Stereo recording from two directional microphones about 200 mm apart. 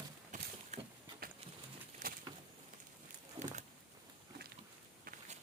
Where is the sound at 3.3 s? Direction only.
35° right (ahead or behind).